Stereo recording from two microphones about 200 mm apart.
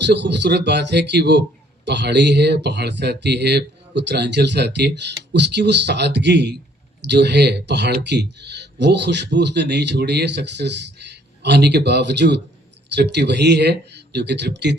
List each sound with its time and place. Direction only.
0.0 s speech: 60° right (ahead or behind)